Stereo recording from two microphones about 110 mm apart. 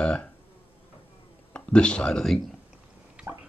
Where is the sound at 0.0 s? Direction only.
10° left (ahead or behind).